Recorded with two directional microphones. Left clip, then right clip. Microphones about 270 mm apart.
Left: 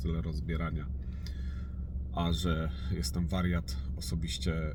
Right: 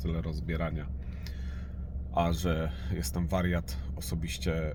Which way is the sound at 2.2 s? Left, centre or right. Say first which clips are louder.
Right 5 dB; centre.